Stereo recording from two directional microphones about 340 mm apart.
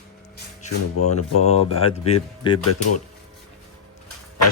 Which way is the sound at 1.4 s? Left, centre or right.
Centre.